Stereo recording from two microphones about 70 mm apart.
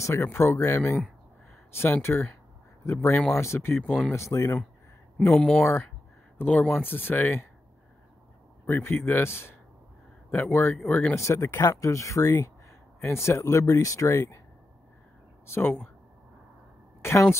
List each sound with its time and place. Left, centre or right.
0.0 s speech: left
5.3 s speech: centre
5.6 s speech: left
8.6 s speech: left
11.1 s speech: left
15.4 s speech: left
17.0 s speech: left